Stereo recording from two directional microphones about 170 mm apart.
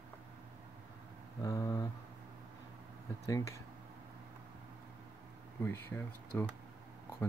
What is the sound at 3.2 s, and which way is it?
Speech, 15° left (ahead or behind).